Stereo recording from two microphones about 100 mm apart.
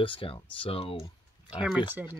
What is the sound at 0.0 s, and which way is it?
Speech, 60° left (ahead or behind).